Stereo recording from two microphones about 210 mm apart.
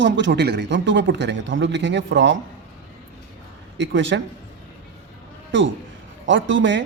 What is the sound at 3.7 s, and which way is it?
Speech, 60° right (ahead or behind).